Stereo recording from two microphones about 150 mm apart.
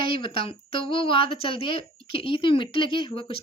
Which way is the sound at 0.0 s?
35° left (ahead or behind).